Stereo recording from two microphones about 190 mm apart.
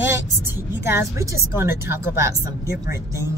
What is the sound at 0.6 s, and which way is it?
Speech, 15° right (ahead or behind).